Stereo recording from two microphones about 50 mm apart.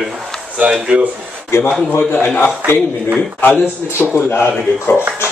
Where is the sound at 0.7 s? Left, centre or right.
Centre.